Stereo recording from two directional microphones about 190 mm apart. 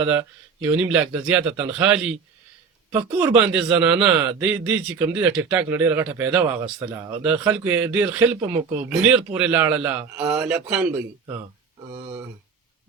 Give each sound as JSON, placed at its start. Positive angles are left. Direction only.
{"t": 0.1, "sound": "a man's voice", "side_deg": -10}